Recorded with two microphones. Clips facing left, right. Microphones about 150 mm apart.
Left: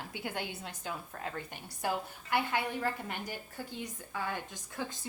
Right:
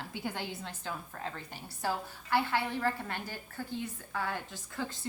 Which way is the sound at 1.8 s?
15° left (ahead or behind).